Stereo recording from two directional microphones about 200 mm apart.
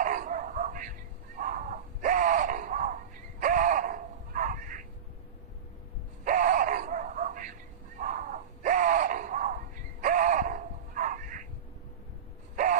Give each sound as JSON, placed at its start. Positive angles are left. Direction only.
{"t": 0.0, "sound": "dog", "side_deg": -40}
{"t": 6.2, "sound": "bow-wow", "side_deg": -40}
{"t": 8.0, "sound": "a sound", "side_deg": -40}